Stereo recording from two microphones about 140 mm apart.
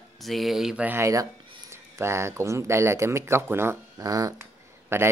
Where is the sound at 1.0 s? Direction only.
20° right (ahead or behind).